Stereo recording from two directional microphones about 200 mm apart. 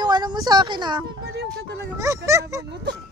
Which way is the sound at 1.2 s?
55° right (ahead or behind).